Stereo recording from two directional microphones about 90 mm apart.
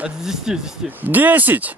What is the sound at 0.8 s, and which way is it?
Speech, 20° right (ahead or behind).